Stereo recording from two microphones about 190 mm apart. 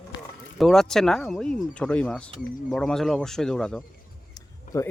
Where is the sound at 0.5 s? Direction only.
Centre (ahead or behind).